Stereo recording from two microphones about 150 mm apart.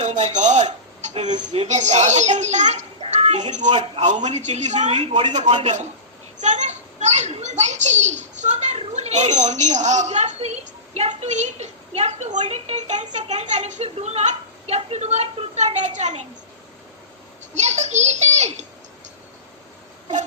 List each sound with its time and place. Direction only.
0.0 s rub: 50° right (ahead or behind)
0.3 s a child's voice: 50° right (ahead or behind)
17.5 s speech: 50° right (ahead or behind)